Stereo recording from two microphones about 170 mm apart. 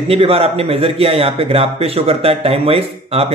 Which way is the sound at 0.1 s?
35° right (ahead or behind).